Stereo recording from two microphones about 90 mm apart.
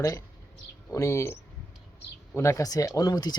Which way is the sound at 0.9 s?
35° left (ahead or behind).